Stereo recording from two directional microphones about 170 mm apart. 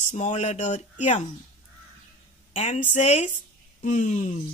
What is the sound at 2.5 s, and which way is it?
Speech, 45° left (ahead or behind).